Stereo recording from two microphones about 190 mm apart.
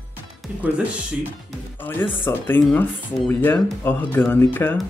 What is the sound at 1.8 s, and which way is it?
Speech, 10° left (ahead or behind).